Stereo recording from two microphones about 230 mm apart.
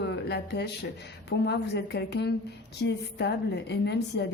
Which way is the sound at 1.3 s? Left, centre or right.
Left.